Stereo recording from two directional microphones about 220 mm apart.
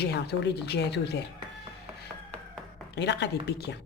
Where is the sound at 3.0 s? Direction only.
50° left (ahead or behind).